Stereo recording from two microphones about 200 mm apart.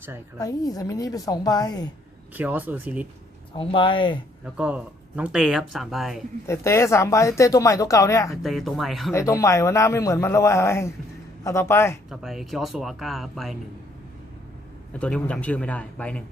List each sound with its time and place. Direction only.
0.3 s speech: 15° left (ahead or behind)
2.3 s speech: 10° right (ahead or behind)
3.6 s speech: 25° left (ahead or behind)
4.5 s speech: 5° right (ahead or behind)
6.5 s speech: 15° left (ahead or behind)
8.4 s speech: centre (ahead or behind)
9.1 s speech: 15° left (ahead or behind)
12.1 s speech: centre (ahead or behind)
14.9 s speech: 5° left (ahead or behind)